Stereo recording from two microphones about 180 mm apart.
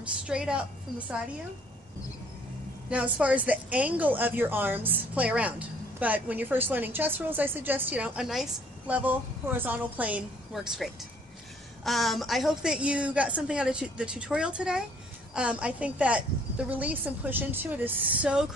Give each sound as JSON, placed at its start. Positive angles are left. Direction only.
{"t": 0.2, "sound": "a woman's voice", "side_deg": -5}
{"t": 2.9, "sound": "a woman's voice", "side_deg": -5}